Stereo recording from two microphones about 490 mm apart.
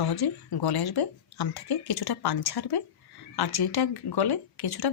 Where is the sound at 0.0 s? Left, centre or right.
Left.